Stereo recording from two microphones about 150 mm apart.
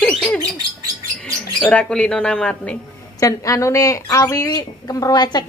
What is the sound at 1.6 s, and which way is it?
Speech, 5° left (ahead or behind).